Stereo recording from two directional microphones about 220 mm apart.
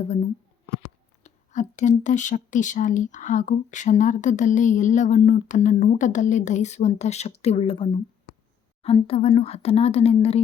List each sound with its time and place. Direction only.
0.0 s speech: 30° left (ahead or behind)